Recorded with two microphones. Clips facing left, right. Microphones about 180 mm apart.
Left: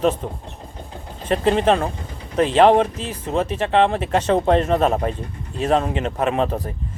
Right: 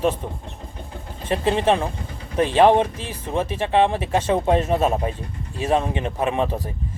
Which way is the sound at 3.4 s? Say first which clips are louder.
Left 1 dB; 15° right (ahead or behind).